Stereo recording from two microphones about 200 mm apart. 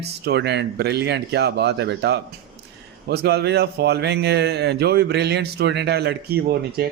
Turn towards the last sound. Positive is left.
turn(degrees=-50)  # may be behind; listen again after turning